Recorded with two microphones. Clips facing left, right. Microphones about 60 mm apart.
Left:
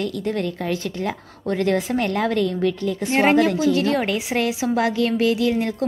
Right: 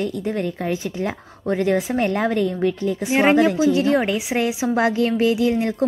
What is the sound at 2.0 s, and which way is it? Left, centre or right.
A woman's voice, right.